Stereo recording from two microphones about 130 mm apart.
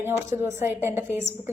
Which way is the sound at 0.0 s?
20° right (ahead or behind).